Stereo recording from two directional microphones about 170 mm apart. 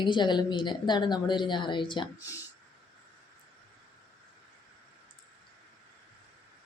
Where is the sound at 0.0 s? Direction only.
25° left (ahead or behind).